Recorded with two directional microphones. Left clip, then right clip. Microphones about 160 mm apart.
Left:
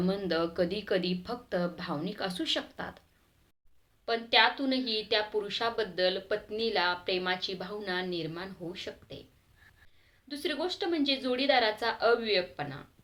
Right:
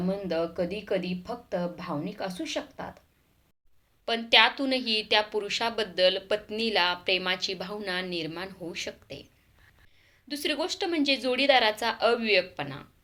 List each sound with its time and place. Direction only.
0.0 s speech: 10° right (ahead or behind)
4.0 s a woman's voice: 25° right (ahead or behind)
10.2 s a woman's voice: 25° right (ahead or behind)